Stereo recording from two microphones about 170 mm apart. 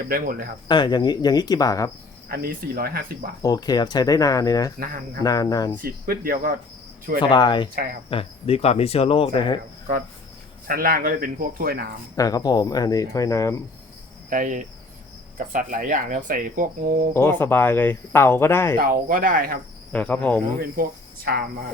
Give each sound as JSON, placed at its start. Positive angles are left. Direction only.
{"t": 0.1, "sound": "speech", "side_deg": -60}
{"t": 0.7, "sound": "speech", "side_deg": 25}
{"t": 2.3, "sound": "speech", "side_deg": -65}
{"t": 3.4, "sound": "speech", "side_deg": 20}
{"t": 5.8, "sound": "speech", "side_deg": -60}
{"t": 7.2, "sound": "speech", "side_deg": 25}
{"t": 10.7, "sound": "speech", "side_deg": -60}
{"t": 12.1, "sound": "speech", "side_deg": 20}
{"t": 14.3, "sound": "speech", "side_deg": -50}
{"t": 17.2, "sound": "speech", "side_deg": 15}
{"t": 18.8, "sound": "speech", "side_deg": -55}
{"t": 19.9, "sound": "speech", "side_deg": 10}